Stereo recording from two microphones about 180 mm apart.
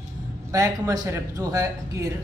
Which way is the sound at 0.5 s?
20° right (ahead or behind).